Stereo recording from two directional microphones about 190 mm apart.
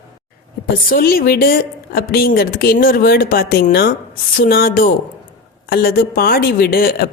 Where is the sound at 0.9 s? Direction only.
50° left (ahead or behind).